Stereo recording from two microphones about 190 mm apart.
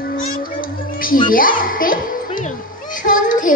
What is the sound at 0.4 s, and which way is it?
Music, 50° left (ahead or behind).